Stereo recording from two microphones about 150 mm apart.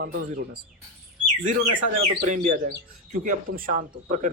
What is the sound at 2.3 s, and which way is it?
Speech, 55° right (ahead or behind).